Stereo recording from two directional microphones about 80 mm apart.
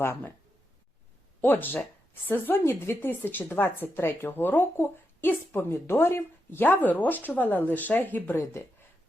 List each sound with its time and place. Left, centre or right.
1.4 s a woman's voice: left